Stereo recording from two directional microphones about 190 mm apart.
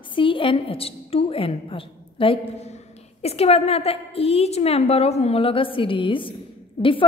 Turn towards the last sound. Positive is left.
turn(degrees=30)  # may be behind; listen again after turning